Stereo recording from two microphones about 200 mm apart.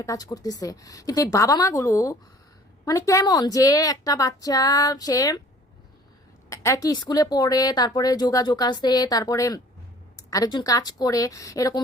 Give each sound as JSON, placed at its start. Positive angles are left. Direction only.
{"t": 0.0, "sound": "a woman's voice", "side_deg": 15}
{"t": 6.5, "sound": "a woman's voice", "side_deg": 15}